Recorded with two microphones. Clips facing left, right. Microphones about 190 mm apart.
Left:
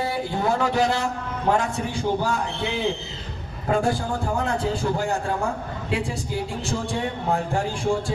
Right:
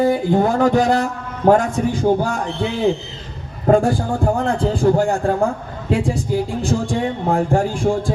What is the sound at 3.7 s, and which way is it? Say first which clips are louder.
Speech: right 8 dB; 50° right (ahead or behind).